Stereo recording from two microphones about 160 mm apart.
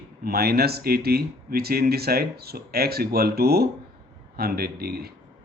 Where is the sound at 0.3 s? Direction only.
75° right (ahead or behind).